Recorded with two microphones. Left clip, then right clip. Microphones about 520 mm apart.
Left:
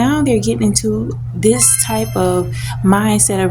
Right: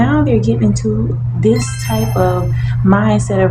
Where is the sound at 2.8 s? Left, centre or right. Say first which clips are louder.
Right 1 dB; left.